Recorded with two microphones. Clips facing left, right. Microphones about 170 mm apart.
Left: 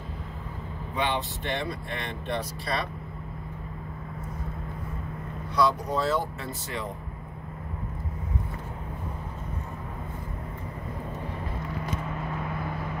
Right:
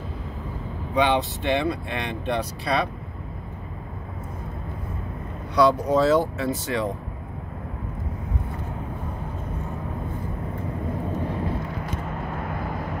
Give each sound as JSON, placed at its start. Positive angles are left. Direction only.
{"t": 0.9, "sound": "speech", "side_deg": -85}
{"t": 5.6, "sound": "speech", "side_deg": -70}